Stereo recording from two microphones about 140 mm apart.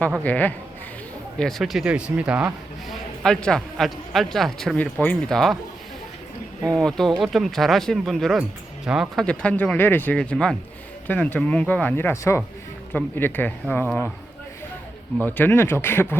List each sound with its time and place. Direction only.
0.2 s speech: 10° left (ahead or behind); by 2.5 s 10° right (ahead or behind)
2.9 s a man's voice: 5° left (ahead or behind)
6.7 s a man's voice: 5° left (ahead or behind)
9.2 s speech: 10° left (ahead or behind)
15.2 s speech: 15° left (ahead or behind)